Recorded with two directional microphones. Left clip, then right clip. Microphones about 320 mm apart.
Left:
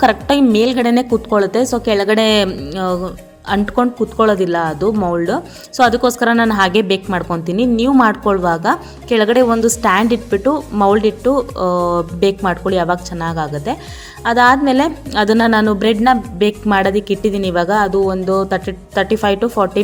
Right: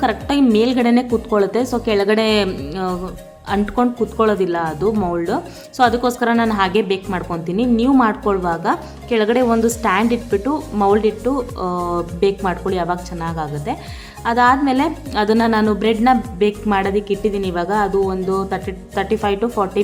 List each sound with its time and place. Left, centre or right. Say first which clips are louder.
0.0 s speech: left 5 dB; centre